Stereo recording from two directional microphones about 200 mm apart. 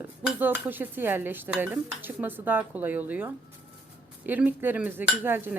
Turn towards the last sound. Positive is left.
turn(degrees=-10)  # may be behind; listen again after turning